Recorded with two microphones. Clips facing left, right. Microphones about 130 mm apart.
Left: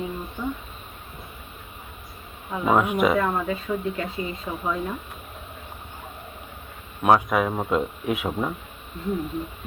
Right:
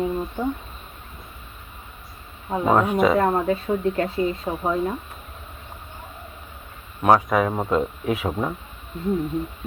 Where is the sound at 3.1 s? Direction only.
40° right (ahead or behind).